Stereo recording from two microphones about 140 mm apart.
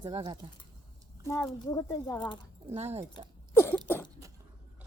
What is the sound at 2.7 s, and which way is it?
Speech, 50° right (ahead or behind).